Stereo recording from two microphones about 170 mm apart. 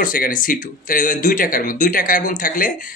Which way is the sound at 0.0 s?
55° left (ahead or behind).